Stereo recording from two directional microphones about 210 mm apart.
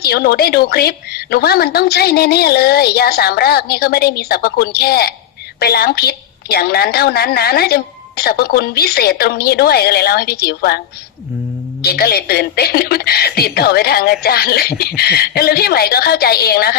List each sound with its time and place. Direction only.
0.0 s a woman's voice: 50° left (ahead or behind)
11.8 s a woman's voice: 50° left (ahead or behind)